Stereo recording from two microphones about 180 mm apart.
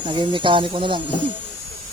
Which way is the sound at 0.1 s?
25° right (ahead or behind).